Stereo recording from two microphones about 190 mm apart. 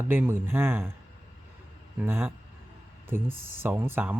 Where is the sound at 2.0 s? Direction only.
10° right (ahead or behind).